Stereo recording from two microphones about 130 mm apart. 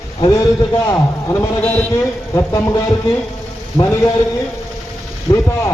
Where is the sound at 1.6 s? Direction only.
10° left (ahead or behind).